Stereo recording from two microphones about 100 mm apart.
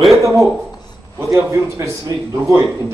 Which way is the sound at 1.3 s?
30° right (ahead or behind).